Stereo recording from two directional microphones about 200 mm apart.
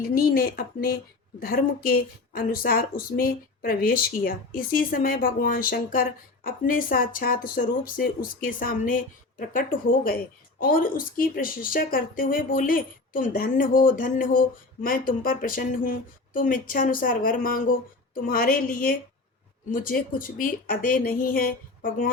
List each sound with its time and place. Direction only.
0.1 s speech: 45° left (ahead or behind)